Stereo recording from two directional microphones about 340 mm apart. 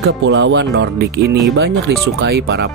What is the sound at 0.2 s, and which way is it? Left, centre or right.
Speech, right.